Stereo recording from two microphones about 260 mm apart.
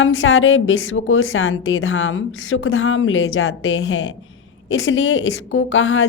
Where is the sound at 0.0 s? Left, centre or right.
Left.